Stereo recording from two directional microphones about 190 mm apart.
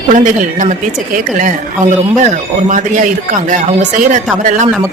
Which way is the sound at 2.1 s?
40° right (ahead or behind).